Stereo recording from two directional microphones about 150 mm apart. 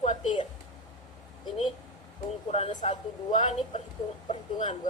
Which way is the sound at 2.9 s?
35° left (ahead or behind).